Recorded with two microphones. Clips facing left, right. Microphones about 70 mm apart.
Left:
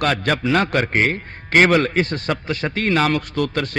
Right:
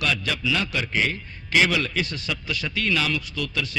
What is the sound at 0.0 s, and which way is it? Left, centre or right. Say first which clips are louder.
A man's voice: left 7 dB; left.